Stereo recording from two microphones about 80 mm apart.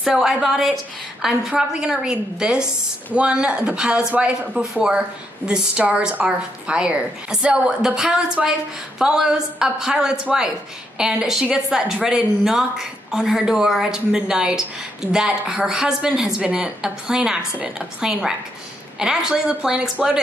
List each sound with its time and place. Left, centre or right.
0.0 s a woman's voice: centre